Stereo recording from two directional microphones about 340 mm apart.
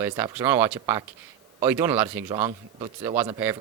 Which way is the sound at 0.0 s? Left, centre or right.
Centre.